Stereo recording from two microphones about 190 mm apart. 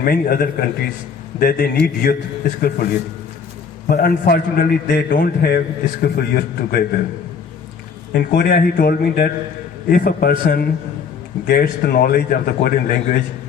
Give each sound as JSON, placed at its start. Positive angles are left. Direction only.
{"t": 0.0, "sound": "a man's voice", "side_deg": 50}
{"t": 3.8, "sound": "a man's voice", "side_deg": 50}
{"t": 8.1, "sound": "a man's voice", "side_deg": 55}